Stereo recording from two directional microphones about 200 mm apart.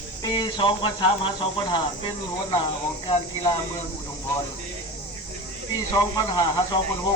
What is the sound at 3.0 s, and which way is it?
Speech, 20° left (ahead or behind).